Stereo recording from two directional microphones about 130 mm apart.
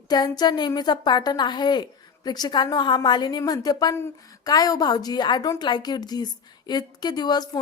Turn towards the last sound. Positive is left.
turn(degrees=30)  # may be behind; listen again after turning